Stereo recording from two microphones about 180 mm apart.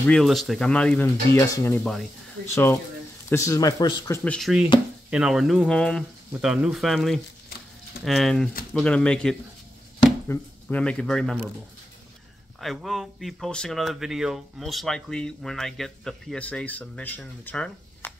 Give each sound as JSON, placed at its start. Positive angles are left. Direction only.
{"t": 0.0, "sound": "speech", "side_deg": 5}
{"t": 4.2, "sound": "speech", "side_deg": 5}
{"t": 12.5, "sound": "speech", "side_deg": 0}